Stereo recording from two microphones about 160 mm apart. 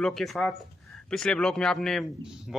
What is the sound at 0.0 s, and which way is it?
Speech, centre (ahead or behind).